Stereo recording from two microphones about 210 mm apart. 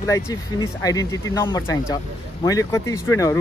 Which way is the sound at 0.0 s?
15° left (ahead or behind).